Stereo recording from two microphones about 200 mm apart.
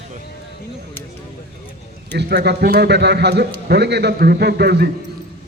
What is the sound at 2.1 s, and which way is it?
A man's voice, 55° right (ahead or behind).